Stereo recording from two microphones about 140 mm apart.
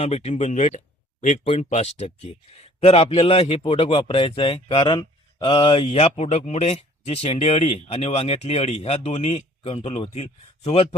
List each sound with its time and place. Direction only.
0.0 s a man's voice: 50° left (ahead or behind)